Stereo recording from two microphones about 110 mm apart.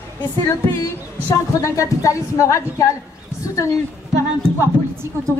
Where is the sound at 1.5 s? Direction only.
30° left (ahead or behind).